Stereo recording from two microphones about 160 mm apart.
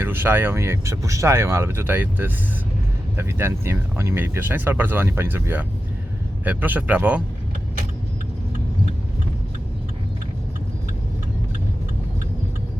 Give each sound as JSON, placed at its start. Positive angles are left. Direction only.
{"t": 0.0, "sound": "speech", "side_deg": -15}